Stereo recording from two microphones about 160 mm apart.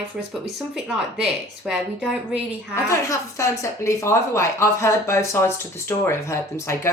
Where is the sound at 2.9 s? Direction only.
20° left (ahead or behind).